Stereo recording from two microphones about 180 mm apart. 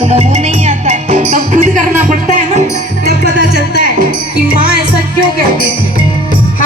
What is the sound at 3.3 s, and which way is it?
Music, 65° right (ahead or behind).